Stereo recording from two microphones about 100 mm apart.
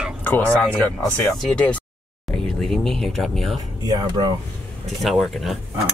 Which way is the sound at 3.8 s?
40° right (ahead or behind).